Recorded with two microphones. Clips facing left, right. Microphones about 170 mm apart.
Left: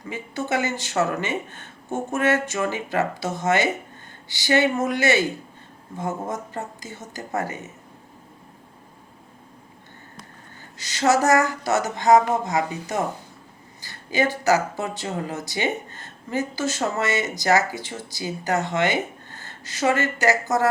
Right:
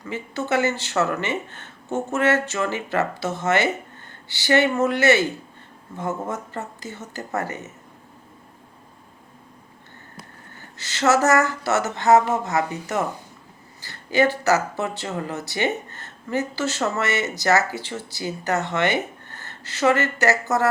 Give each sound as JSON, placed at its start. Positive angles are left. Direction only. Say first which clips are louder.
{"t": 0.0, "sound": "speech", "louder": "right 1 dB", "side_deg": 15}
{"t": 10.8, "sound": "speech", "louder": "even", "side_deg": 15}